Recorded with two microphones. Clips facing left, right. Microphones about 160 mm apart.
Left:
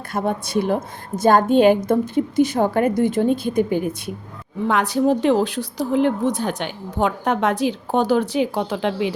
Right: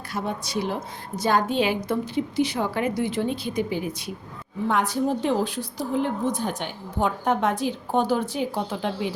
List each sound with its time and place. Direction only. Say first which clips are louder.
0.1 s a woman's voice: left 7 dB; 55° left (ahead or behind)
4.7 s a woman's voice: left 6 dB; 80° left